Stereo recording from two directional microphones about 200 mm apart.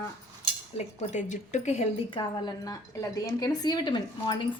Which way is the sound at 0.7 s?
35° left (ahead or behind).